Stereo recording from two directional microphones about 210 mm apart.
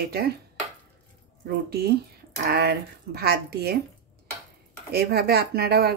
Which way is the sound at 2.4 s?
50° right (ahead or behind).